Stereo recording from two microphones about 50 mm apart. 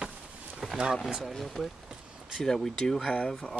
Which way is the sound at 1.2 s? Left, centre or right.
Centre.